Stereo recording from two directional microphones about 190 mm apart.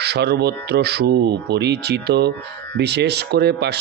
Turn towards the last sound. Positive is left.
turn(degrees=-60)  # may be behind; listen again after turning